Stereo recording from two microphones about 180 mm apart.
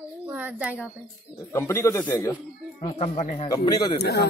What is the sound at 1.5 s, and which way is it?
Speech, 15° left (ahead or behind).